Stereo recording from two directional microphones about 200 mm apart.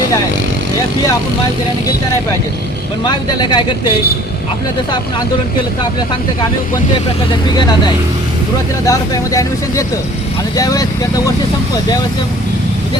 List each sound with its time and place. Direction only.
3.1 s speech: 20° left (ahead or behind)
6.9 s speech: 20° left (ahead or behind)